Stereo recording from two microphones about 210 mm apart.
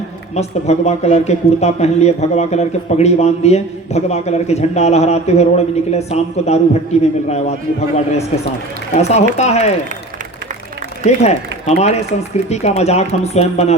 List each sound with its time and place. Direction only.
0.3 s speech: 30° left (ahead or behind)
9.0 s speech: 30° left (ahead or behind)
11.0 s speech: 30° left (ahead or behind)